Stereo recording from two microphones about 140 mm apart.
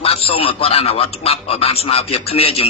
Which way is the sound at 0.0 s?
45° left (ahead or behind).